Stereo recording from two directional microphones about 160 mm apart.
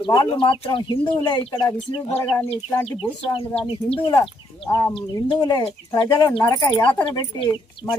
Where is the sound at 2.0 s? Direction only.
40° left (ahead or behind).